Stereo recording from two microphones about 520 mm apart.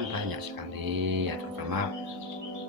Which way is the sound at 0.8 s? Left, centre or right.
Right.